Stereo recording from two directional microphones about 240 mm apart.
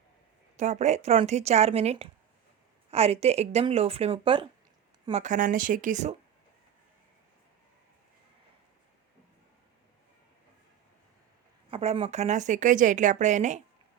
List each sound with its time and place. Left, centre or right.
0.5 s speech: right
11.7 s speech: right